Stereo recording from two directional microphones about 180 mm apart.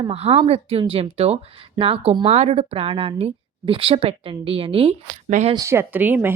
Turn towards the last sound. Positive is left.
turn(degrees=-10)  # may be behind; listen again after turning